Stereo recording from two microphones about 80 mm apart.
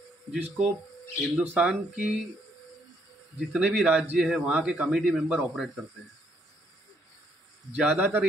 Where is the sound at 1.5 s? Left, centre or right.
Centre.